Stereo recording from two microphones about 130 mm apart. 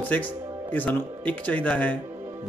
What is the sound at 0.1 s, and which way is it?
Speech, 10° left (ahead or behind).